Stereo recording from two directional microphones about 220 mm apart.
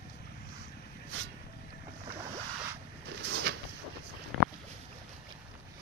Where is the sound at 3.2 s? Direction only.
50° right (ahead or behind).